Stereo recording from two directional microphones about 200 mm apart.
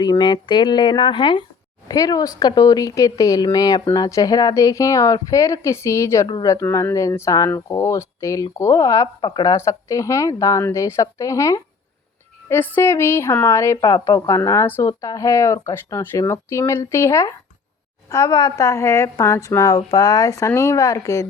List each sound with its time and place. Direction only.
0.0 s speech: 20° left (ahead or behind)